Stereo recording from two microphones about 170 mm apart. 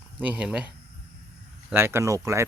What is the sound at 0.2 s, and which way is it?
Speech, 10° right (ahead or behind).